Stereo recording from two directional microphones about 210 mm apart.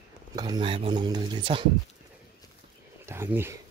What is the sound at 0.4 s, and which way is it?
Speech, 20° right (ahead or behind).